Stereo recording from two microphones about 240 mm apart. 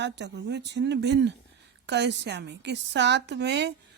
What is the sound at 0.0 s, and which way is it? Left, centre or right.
Speech, right.